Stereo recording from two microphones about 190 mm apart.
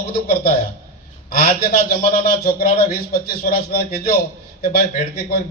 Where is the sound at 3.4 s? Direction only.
50° left (ahead or behind).